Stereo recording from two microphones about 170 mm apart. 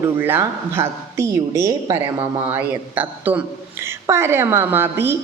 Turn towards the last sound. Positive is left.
turn(degrees=-10)  # may be behind; listen again after turning